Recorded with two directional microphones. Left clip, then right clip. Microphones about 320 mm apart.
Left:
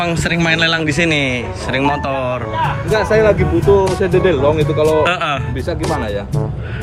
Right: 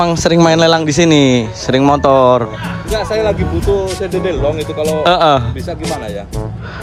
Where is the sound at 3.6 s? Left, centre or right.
Centre.